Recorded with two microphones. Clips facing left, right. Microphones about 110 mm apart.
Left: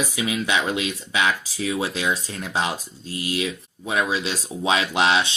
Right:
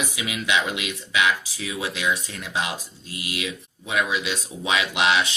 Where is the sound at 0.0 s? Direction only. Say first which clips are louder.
Left 4 dB; 35° left (ahead or behind).